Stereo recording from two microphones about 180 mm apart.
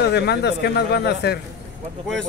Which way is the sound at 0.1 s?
70° left (ahead or behind).